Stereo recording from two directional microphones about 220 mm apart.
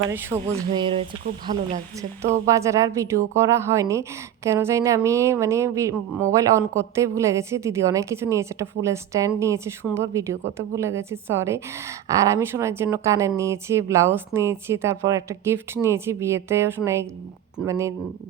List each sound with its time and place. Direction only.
0.1 s a woman's voice: 10° right (ahead or behind)
0.3 s music: 25° right (ahead or behind)
2.5 s a woman's voice: 15° right (ahead or behind)